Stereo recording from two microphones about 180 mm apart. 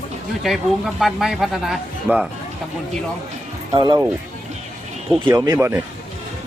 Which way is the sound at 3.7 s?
25° right (ahead or behind).